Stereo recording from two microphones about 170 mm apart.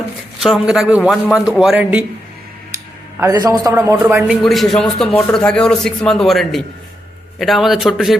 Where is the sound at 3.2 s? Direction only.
20° right (ahead or behind); by 8.1 s centre (ahead or behind).